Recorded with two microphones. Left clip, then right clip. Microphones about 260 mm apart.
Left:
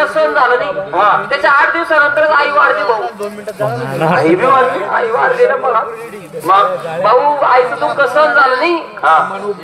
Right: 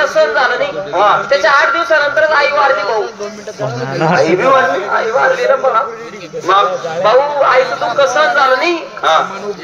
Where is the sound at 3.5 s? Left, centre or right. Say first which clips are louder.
Left 1 dB; centre.